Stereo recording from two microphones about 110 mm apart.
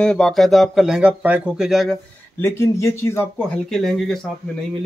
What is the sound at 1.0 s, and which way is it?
Speech, 10° right (ahead or behind).